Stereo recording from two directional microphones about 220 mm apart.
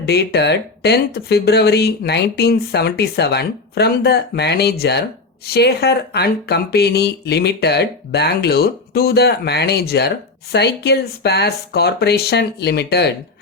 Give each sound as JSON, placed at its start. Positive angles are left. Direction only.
{"t": 0.0, "sound": "speech", "side_deg": 50}